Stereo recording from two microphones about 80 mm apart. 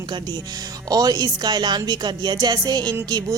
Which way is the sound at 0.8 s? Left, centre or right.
Right.